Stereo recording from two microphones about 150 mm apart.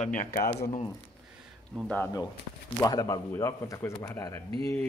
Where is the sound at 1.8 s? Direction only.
10° left (ahead or behind).